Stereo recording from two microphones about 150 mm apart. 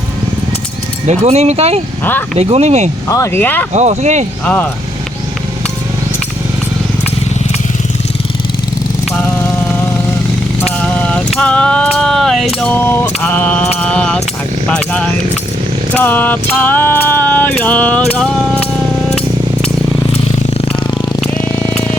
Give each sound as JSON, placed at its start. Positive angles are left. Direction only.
{"t": 1.2, "sound": "speech", "side_deg": -45}
{"t": 3.1, "sound": "music", "side_deg": 15}
{"t": 3.7, "sound": "speech", "side_deg": -50}
{"t": 4.4, "sound": "music", "side_deg": 10}
{"t": 10.8, "sound": "a sound", "side_deg": 10}
{"t": 13.7, "sound": "mantra", "side_deg": 10}
{"t": 14.7, "sound": "music", "side_deg": 10}
{"t": 20.5, "sound": "a sound", "side_deg": 35}
{"t": 21.2, "sound": "a sound", "side_deg": 10}